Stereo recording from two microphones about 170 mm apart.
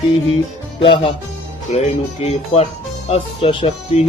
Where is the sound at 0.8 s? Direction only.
30° left (ahead or behind).